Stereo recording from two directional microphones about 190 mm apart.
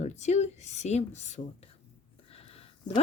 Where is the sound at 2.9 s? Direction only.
20° left (ahead or behind).